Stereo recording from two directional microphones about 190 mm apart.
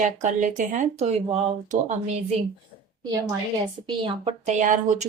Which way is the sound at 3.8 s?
25° right (ahead or behind).